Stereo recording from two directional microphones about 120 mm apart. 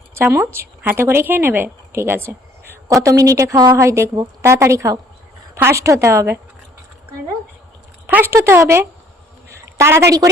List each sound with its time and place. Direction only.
0.1 s a woman's voice: 20° right (ahead or behind)
8.0 s a woman's voice: 20° right (ahead or behind)
9.5 s a sound: 25° right (ahead or behind)